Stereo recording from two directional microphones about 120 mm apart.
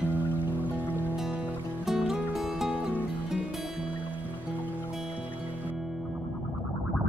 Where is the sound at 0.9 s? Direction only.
15° left (ahead or behind).